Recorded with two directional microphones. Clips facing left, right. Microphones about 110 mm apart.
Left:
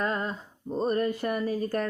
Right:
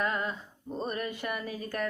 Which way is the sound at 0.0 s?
35° left (ahead or behind).